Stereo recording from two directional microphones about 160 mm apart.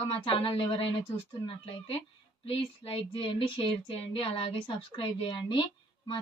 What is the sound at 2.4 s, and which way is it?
A woman's voice, 35° left (ahead or behind).